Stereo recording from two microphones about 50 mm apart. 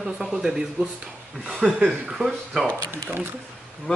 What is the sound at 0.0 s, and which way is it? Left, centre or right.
Speech, centre.